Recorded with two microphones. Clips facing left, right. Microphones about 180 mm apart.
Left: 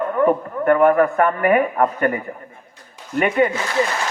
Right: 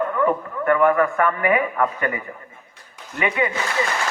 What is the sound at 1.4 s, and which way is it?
Speech, 55° left (ahead or behind).